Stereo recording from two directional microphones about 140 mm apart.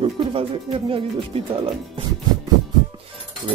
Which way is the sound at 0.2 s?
40° right (ahead or behind).